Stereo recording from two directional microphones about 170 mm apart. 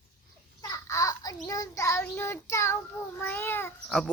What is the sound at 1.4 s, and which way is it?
Child singing, 20° left (ahead or behind).